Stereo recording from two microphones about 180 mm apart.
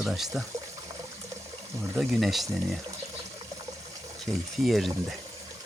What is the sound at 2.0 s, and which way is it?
Speech, centre (ahead or behind).